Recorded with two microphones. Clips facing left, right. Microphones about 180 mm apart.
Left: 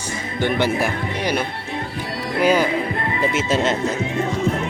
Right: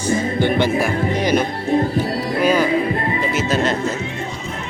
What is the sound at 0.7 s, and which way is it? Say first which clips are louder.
Speech: right 4 dB; 30° right (ahead or behind).